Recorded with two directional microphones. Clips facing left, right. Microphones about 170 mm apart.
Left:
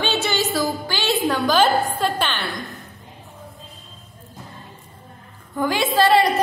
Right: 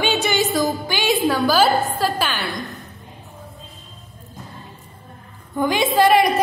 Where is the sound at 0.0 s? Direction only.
15° right (ahead or behind).